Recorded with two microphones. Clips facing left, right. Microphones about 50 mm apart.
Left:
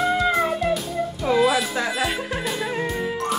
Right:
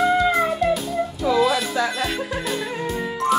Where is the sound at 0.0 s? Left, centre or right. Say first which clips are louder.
Right 2 dB; centre.